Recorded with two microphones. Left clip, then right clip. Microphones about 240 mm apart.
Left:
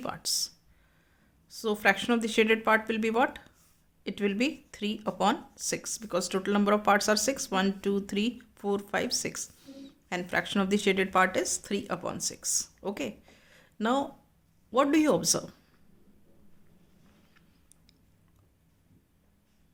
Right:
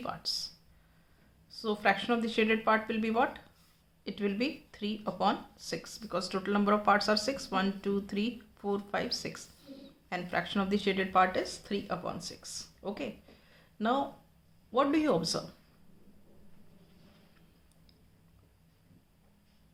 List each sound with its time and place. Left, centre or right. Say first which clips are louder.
0.0 s speech: left 4 dB; left